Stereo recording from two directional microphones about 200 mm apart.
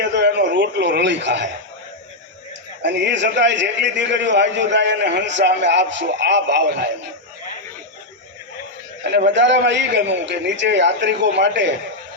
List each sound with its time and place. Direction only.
0.0 s a sound: 60° right (ahead or behind)
2.8 s a man's voice: 60° right (ahead or behind)
9.1 s a man's voice: 60° right (ahead or behind)